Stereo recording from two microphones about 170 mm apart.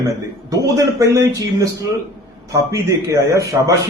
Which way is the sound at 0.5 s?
20° right (ahead or behind).